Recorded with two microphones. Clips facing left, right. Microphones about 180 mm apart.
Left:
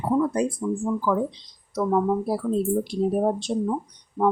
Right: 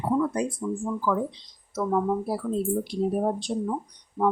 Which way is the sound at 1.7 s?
15° left (ahead or behind).